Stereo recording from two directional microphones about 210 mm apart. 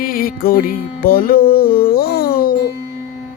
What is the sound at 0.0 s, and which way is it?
Music, 45° left (ahead or behind).